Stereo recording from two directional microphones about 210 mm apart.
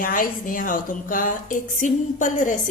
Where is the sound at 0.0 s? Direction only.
40° left (ahead or behind).